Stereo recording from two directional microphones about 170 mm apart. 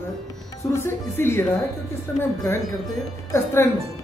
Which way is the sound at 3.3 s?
15° left (ahead or behind).